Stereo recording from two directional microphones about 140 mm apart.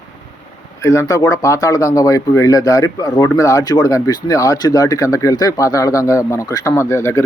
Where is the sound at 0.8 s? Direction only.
20° left (ahead or behind).